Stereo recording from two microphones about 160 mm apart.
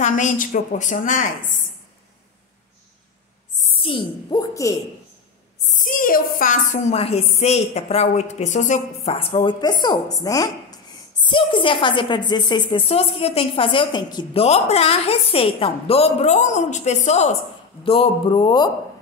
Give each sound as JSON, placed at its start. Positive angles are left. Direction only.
{"t": 0.0, "sound": "a woman's voice", "side_deg": 55}
{"t": 3.6, "sound": "a sound", "side_deg": 35}
{"t": 5.7, "sound": "a woman's voice", "side_deg": 55}
{"t": 7.0, "sound": "a woman's voice", "side_deg": 40}